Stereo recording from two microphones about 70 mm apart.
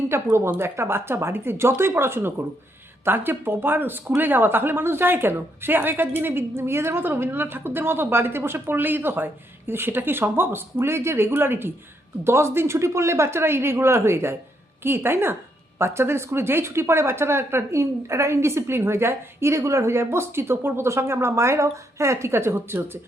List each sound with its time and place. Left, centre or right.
0.1 s speech: right